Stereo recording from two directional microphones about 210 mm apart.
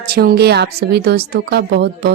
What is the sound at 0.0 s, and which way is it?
Speech, 50° right (ahead or behind).